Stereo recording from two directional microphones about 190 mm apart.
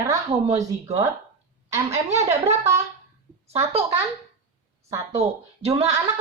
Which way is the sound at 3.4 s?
35° right (ahead or behind).